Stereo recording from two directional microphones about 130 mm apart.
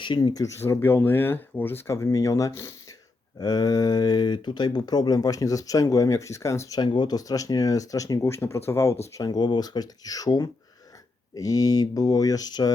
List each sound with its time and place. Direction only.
0.0 s speech: 35° left (ahead or behind); by 9.0 s 20° left (ahead or behind)
9.1 s speech: 30° left (ahead or behind)